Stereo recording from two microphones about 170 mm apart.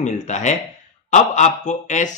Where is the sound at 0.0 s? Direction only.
45° left (ahead or behind).